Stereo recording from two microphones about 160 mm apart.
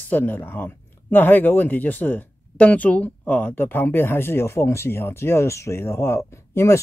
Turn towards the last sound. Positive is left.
turn(degrees=15)  # may be behind; listen again after turning